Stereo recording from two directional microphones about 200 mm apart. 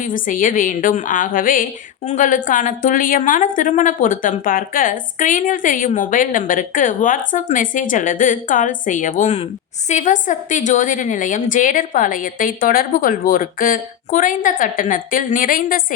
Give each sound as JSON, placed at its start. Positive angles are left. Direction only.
{"t": 0.0, "sound": "a woman's voice", "side_deg": 40}